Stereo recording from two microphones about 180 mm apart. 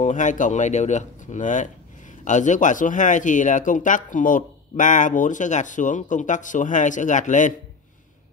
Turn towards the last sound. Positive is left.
turn(degrees=45)  # may be behind; listen again after turning